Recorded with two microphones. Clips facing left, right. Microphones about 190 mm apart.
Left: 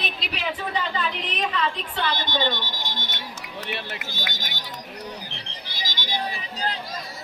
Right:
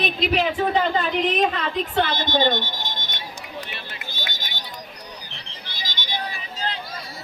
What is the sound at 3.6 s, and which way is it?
Speech, 70° left (ahead or behind).